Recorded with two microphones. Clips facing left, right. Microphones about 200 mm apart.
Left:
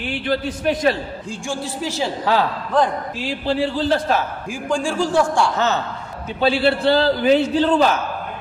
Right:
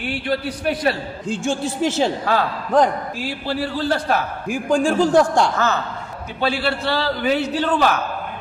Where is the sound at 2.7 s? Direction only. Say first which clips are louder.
Right 5 dB; 10° right (ahead or behind).